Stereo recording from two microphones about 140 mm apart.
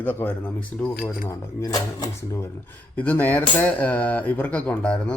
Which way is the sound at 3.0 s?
10° left (ahead or behind).